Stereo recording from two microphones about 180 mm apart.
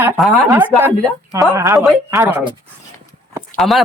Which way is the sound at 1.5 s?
15° right (ahead or behind).